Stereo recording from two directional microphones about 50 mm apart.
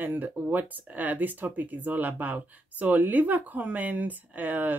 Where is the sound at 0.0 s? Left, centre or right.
Right.